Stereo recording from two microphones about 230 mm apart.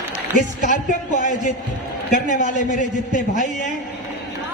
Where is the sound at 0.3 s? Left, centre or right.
Left.